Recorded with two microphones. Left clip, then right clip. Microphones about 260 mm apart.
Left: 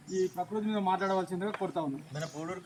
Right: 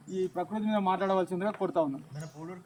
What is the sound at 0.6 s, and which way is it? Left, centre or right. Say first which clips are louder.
Speech: right 3 dB; centre.